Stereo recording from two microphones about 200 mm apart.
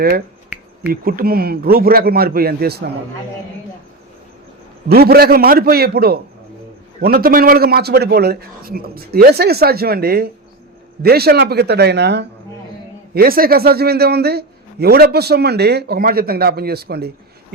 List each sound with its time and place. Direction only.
1.0 s a man's voice: 50° right (ahead or behind)
4.9 s a man's voice: 50° right (ahead or behind)